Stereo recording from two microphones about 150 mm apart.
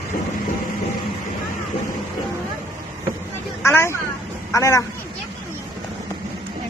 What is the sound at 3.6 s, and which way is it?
Vehicle, 15° left (ahead or behind).